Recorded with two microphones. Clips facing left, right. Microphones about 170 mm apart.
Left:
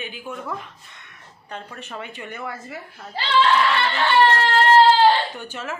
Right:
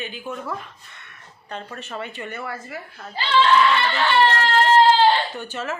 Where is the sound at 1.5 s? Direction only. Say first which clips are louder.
Right 2 dB; 10° left (ahead or behind).